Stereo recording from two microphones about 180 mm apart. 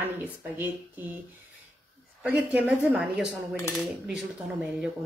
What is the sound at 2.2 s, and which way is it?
Speech, 10° right (ahead or behind).